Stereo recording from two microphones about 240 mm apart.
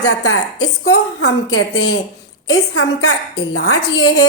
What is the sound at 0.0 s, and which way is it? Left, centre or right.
A woman's voice, left.